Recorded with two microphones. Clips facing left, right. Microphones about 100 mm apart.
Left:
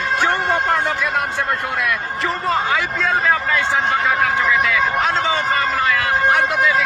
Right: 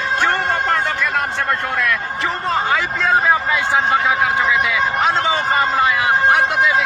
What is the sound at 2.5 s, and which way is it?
Speech, centre (ahead or behind).